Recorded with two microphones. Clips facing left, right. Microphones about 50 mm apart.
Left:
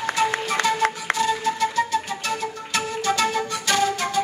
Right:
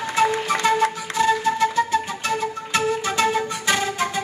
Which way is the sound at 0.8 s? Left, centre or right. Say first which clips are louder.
Right 1 dB; left.